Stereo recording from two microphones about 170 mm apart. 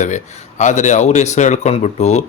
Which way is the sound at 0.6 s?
45° left (ahead or behind).